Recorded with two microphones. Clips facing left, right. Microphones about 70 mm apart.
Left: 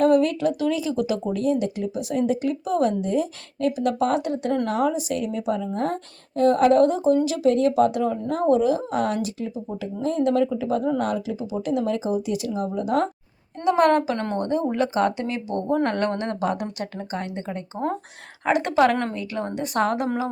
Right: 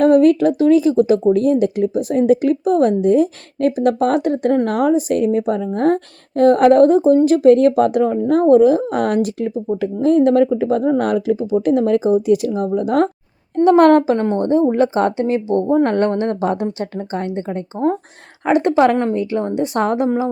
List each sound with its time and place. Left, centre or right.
0.0 s speech: right
18.7 s a woman's voice: right